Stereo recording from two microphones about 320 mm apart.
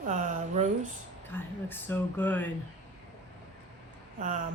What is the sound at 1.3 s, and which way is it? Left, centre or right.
Speech, centre.